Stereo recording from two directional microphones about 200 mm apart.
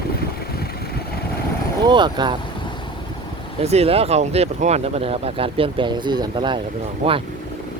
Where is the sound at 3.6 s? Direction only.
30° right (ahead or behind).